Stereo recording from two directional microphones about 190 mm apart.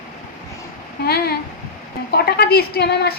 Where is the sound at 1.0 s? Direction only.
55° left (ahead or behind).